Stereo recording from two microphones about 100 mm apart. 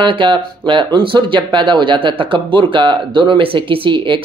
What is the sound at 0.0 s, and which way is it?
Speech, 55° right (ahead or behind).